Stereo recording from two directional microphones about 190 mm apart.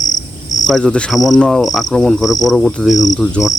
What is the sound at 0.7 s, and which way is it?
Cricket, 5° left (ahead or behind).